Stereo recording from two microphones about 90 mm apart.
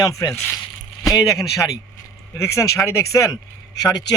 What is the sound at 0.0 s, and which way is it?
Speech, 40° left (ahead or behind).